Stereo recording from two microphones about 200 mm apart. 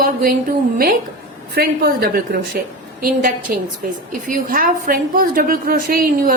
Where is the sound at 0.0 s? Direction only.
45° right (ahead or behind).